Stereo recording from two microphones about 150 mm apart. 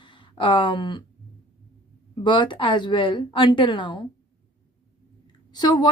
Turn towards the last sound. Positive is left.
turn(degrees=30)  # may be behind; listen again after turning